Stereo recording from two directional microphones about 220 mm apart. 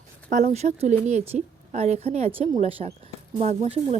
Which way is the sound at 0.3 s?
35° right (ahead or behind).